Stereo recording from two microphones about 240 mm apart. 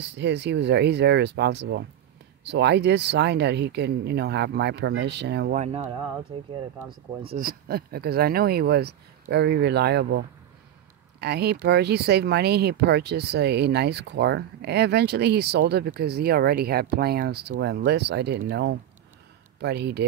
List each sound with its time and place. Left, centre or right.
0.0 s speech: right
5.6 s speech: right
7.2 s speech: right